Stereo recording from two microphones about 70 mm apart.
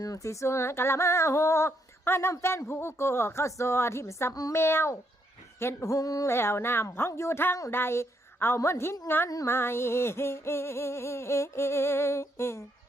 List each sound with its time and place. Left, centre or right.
0.0 s speech: left
6.2 s a woman's voice: left